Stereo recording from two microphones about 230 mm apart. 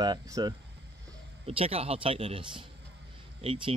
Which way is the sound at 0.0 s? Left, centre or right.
Centre.